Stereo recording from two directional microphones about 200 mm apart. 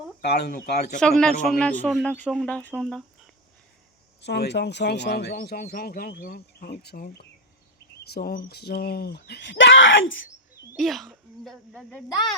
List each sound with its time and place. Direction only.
0.3 s speech: 55° left (ahead or behind)
0.9 s a man's voice: 5° left (ahead or behind)
4.2 s speech: 60° left (ahead or behind)
10.8 s a man's voice: centre (ahead or behind)